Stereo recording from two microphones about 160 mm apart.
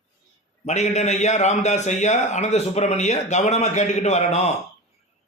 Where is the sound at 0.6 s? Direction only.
45° left (ahead or behind).